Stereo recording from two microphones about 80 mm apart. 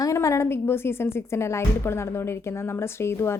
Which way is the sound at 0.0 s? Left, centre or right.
Left.